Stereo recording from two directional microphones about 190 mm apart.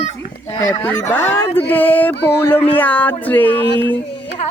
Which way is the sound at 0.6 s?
15° left (ahead or behind).